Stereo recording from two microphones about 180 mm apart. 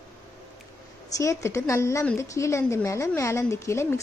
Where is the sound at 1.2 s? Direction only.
15° left (ahead or behind).